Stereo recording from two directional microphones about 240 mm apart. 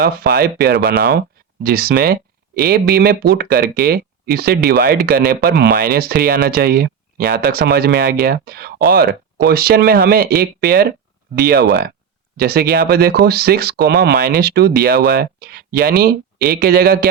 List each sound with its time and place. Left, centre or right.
0.0 s speech: right